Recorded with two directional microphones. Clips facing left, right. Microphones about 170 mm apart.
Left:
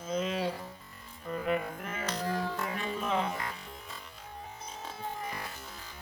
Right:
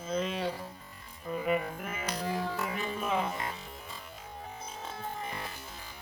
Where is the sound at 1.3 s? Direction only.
5° right (ahead or behind).